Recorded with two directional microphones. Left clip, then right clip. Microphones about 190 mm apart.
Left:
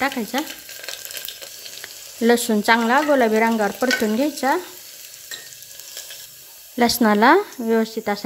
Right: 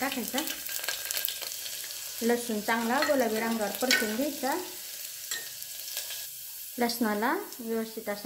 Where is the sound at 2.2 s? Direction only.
55° left (ahead or behind).